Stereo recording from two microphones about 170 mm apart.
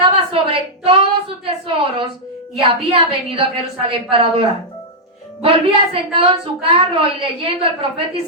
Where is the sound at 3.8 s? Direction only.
35° right (ahead or behind).